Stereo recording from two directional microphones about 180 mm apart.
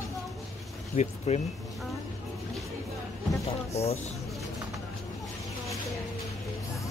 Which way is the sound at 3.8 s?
35° left (ahead or behind).